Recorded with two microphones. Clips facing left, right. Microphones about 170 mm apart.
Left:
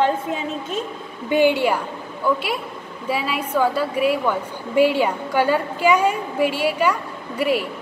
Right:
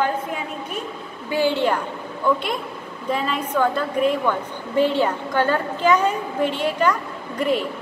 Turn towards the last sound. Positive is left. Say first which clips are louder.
# left 1 dB
turn(degrees=10)  # may be behind; listen again after turning